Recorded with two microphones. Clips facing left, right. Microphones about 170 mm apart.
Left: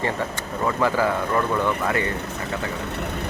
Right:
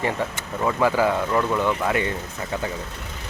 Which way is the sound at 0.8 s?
15° right (ahead or behind).